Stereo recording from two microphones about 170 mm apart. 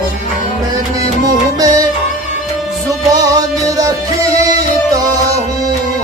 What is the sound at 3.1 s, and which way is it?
Music, 20° right (ahead or behind).